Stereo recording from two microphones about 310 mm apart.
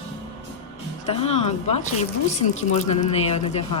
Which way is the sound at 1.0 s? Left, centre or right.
Centre.